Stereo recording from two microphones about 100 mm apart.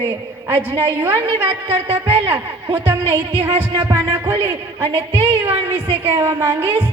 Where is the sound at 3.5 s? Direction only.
90° right.